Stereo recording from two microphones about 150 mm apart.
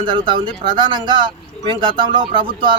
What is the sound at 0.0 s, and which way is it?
Speech, 30° right (ahead or behind).